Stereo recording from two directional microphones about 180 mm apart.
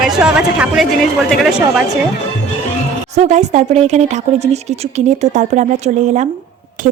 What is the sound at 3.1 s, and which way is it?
Speech, 40° right (ahead or behind).